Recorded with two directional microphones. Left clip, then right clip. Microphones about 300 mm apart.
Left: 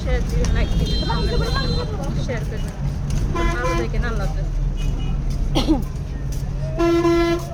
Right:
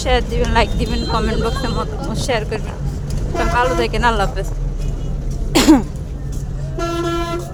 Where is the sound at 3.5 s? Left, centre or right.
Right.